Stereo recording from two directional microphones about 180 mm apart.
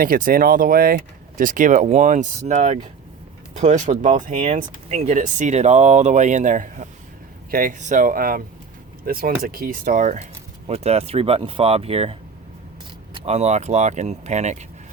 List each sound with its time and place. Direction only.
0.0 s speech: 50° right (ahead or behind); by 12.1 s 35° right (ahead or behind)
13.1 s speech: 35° right (ahead or behind)